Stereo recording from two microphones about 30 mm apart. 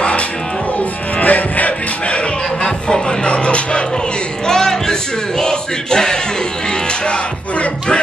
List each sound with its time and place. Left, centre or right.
1.2 s music: left
2.6 s music: left
4.5 s music: centre
5.4 s a sound: left